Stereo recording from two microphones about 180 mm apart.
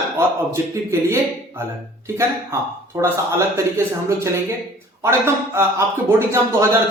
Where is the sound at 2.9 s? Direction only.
20° right (ahead or behind).